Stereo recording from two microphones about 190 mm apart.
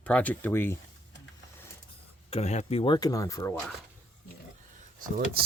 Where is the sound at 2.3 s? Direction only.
35° left (ahead or behind); by 3.6 s 15° left (ahead or behind).